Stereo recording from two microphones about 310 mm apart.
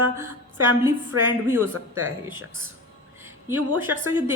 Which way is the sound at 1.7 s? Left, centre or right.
Right.